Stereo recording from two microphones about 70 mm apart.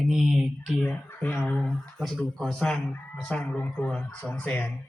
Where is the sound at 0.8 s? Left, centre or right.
Left.